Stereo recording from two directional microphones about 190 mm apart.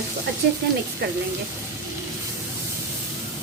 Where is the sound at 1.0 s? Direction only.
60° right (ahead or behind).